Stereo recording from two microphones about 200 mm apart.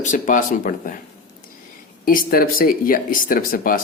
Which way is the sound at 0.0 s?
40° left (ahead or behind).